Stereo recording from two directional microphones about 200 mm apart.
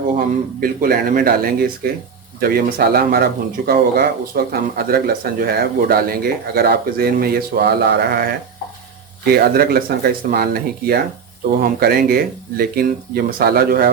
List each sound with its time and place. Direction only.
0.1 s speech: 45° right (ahead or behind)